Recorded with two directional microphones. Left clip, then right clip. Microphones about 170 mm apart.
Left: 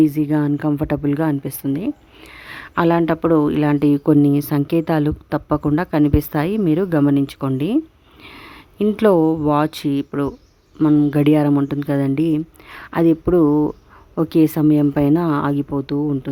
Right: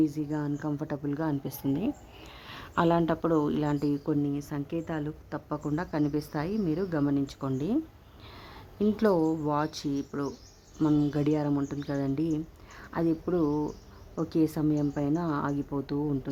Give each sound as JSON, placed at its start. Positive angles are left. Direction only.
{"t": 0.0, "sound": "speech", "side_deg": 40}
{"t": 10.8, "sound": "speech", "side_deg": 25}